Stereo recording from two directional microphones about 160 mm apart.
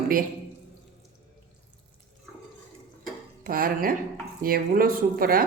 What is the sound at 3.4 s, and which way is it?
Speech, 65° right (ahead or behind).